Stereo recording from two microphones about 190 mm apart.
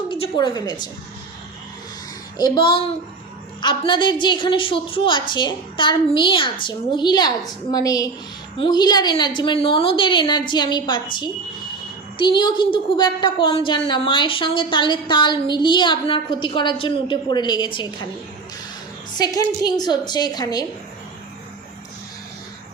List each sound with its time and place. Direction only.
0.1 s a woman's voice: 25° left (ahead or behind)
2.4 s a woman's voice: 25° left (ahead or behind)
19.1 s a woman's voice: 20° left (ahead or behind)